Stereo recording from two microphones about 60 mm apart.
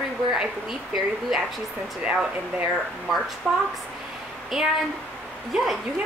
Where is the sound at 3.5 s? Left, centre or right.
Centre.